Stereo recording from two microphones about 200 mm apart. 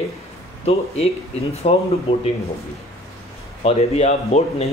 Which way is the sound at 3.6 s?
30° left (ahead or behind).